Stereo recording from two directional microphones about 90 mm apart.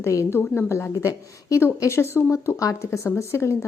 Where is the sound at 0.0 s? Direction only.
30° left (ahead or behind).